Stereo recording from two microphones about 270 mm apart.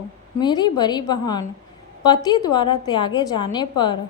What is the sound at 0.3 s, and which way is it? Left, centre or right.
A woman's voice, centre.